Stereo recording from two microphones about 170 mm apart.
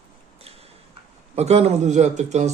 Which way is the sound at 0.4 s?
35° right (ahead or behind).